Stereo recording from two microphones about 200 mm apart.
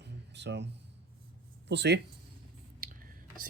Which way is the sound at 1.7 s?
55° right (ahead or behind).